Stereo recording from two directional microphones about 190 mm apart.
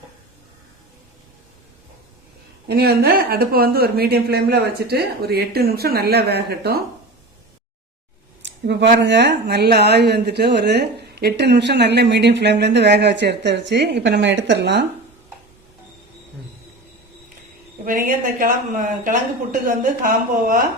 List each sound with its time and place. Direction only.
2.6 s speech: 55° right (ahead or behind)
8.4 s speech: 65° right (ahead or behind)
17.8 s a woman's voice: 45° right (ahead or behind)